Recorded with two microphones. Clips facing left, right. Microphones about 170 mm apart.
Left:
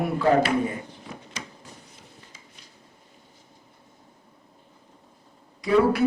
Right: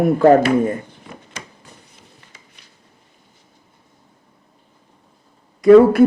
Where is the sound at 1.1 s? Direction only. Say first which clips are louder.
Right 2 dB; 55° right (ahead or behind).